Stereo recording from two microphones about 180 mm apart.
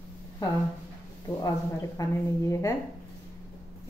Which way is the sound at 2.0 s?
20° left (ahead or behind).